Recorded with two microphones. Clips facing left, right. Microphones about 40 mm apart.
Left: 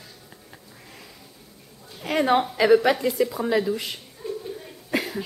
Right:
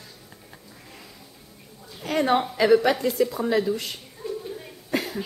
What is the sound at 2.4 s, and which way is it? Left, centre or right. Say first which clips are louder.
A woman's voice: left 1 dB; centre.